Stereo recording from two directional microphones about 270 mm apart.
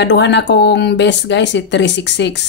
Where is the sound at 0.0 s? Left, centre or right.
Left.